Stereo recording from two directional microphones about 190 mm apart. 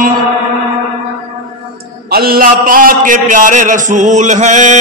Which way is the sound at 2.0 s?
55° right (ahead or behind).